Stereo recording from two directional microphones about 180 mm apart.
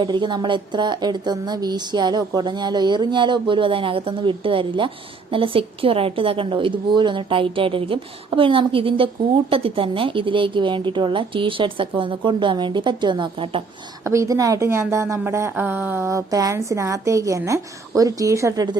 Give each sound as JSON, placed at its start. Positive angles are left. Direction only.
{"t": 0.0, "sound": "a woman's voice", "side_deg": -25}
{"t": 14.0, "sound": "a woman's voice", "side_deg": -15}